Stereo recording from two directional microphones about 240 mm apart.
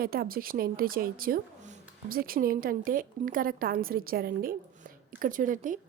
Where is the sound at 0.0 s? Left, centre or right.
Right.